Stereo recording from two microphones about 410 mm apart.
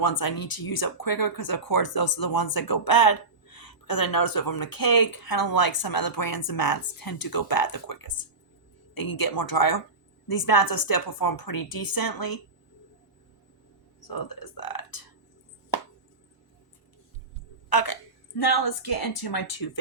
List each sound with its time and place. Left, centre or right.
0.0 s speech: left
14.1 s speech: left
17.7 s a woman's voice: left